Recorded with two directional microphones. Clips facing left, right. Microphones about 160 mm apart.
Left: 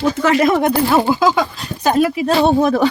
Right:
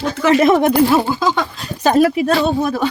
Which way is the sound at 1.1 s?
5° left (ahead or behind).